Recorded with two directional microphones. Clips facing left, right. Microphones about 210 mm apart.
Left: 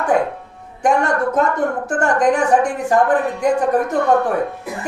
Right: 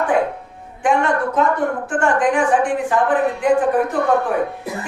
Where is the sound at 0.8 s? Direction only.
40° left (ahead or behind).